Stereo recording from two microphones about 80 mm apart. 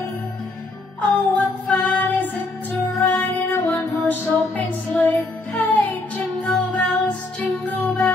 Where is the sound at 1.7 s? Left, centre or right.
Centre.